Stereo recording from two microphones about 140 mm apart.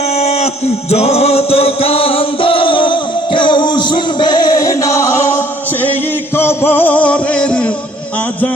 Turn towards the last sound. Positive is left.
turn(degrees=5)  # may be behind; listen again after turning